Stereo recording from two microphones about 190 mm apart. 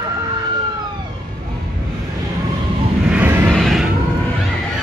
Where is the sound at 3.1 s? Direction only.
10° right (ahead or behind).